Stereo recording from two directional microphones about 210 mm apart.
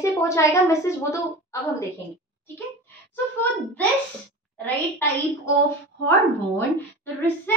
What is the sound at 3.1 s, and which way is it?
A woman's voice, 10° left (ahead or behind).